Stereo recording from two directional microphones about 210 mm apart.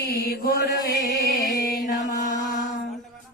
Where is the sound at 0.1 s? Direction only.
50° left (ahead or behind).